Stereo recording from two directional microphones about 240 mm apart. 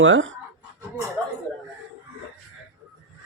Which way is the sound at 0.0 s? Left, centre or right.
Right.